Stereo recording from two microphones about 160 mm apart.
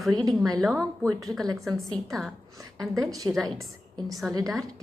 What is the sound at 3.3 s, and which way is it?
Speech, centre (ahead or behind).